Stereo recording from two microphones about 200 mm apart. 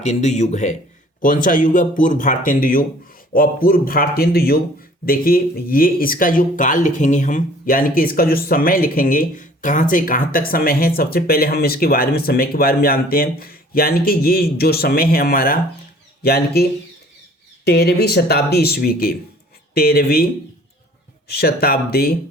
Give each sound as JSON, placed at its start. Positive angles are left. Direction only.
{"t": 0.0, "sound": "speech", "side_deg": 35}
{"t": 17.7, "sound": "speech", "side_deg": 55}
{"t": 21.2, "sound": "speech", "side_deg": 50}